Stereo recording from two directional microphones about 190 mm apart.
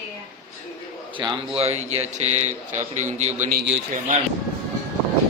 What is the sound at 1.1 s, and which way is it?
A man's voice, 25° right (ahead or behind).